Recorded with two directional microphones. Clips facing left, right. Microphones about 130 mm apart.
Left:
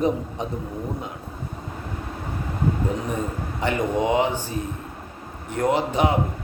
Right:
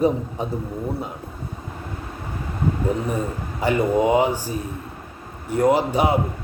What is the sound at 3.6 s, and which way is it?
Speech, 10° right (ahead or behind).